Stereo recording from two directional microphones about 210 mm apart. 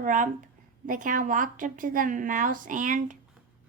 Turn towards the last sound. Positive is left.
turn(degrees=-40)  # may be behind; listen again after turning